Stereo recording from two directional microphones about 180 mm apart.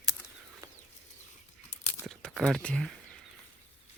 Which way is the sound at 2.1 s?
5° left (ahead or behind).